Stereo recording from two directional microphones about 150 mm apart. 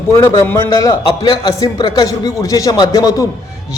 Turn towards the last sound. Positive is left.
turn(degrees=25)  # may be behind; listen again after turning